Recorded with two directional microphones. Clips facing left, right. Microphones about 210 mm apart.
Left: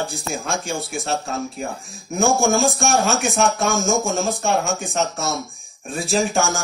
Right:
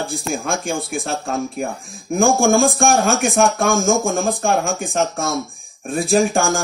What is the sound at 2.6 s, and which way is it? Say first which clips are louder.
Speech: right 3 dB; 55° right (ahead or behind).